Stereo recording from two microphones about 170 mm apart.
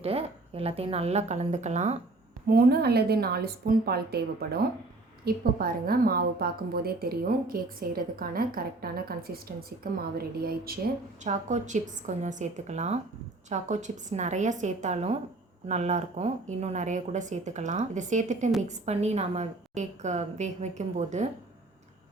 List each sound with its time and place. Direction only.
0.0 s a woman's voice: 35° right (ahead or behind)
2.5 s a woman's voice: 65° right (ahead or behind)
11.2 s speech: 45° right (ahead or behind)